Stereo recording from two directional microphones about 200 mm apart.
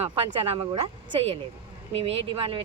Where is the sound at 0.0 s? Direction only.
25° right (ahead or behind).